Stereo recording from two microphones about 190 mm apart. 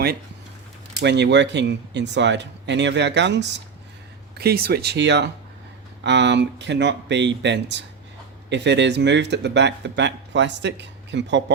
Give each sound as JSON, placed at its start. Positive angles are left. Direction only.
{"t": 1.0, "sound": "speech", "side_deg": -65}
{"t": 4.4, "sound": "speech", "side_deg": -55}